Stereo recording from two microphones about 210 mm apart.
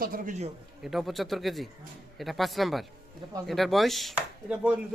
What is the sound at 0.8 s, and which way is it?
A man's voice, centre (ahead or behind).